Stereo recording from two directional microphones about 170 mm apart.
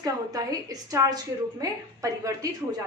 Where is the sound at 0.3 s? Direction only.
20° right (ahead or behind).